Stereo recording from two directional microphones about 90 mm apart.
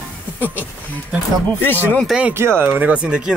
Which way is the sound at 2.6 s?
20° right (ahead or behind).